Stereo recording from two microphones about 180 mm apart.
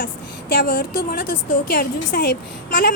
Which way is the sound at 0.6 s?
50° left (ahead or behind).